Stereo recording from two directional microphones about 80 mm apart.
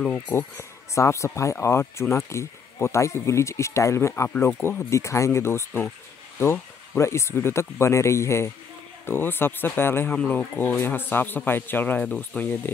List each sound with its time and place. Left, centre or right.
0.0 s a man's voice: left